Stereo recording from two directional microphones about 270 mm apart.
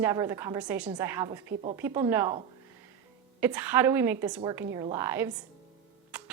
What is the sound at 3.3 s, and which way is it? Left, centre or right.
A woman's voice, centre.